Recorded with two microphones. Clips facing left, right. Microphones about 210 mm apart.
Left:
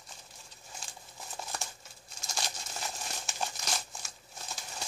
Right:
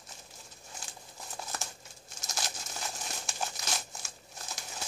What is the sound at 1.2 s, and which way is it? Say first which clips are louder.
Crumpling: even; centre (ahead or behind).